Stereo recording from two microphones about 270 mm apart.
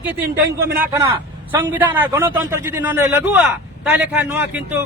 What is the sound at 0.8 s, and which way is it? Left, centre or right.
A man's voice, centre.